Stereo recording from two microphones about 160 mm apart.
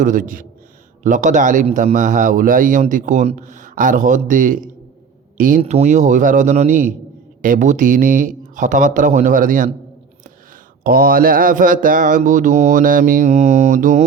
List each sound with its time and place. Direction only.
0.0 s mantra: 55° right (ahead or behind)
1.0 s a man's voice: 50° right (ahead or behind)
7.4 s mantra: 55° right (ahead or behind)
10.8 s mantra: 65° right (ahead or behind); by 14.0 s 50° right (ahead or behind)